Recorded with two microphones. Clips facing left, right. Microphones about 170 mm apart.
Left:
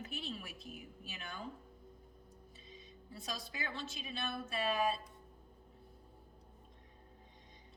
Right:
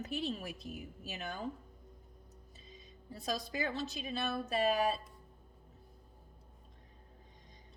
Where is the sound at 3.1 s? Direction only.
40° right (ahead or behind).